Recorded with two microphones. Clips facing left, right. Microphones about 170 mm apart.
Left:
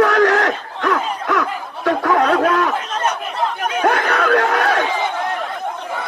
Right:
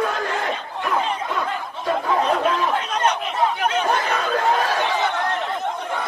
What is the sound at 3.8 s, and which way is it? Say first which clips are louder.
Chatter: left 5 dB; 75° left (ahead or behind).